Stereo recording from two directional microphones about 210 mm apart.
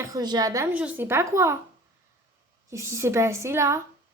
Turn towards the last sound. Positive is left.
turn(degrees=-15)  # may be behind; listen again after turning